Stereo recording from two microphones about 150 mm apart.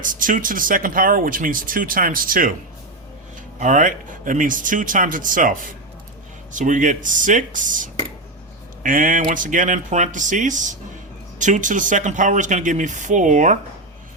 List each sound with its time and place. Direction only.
0.0 s speech: 65° right (ahead or behind)
3.6 s speech: 60° right (ahead or behind)